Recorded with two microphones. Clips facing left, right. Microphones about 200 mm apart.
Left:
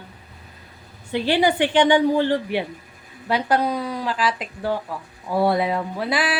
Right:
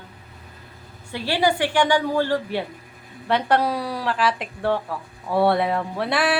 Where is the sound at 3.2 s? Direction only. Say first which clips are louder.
Even; 5° left (ahead or behind).